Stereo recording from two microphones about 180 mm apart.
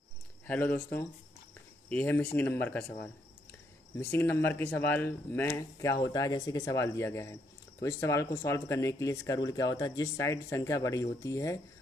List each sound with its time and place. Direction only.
0.5 s speech: 10° left (ahead or behind)
4.0 s speech: 10° left (ahead or behind)